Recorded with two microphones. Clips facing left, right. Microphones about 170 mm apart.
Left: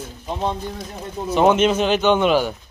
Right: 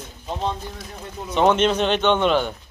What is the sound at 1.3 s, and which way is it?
Speech, 5° left (ahead or behind).